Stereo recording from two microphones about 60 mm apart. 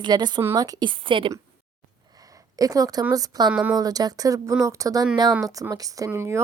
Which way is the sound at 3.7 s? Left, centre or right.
Right.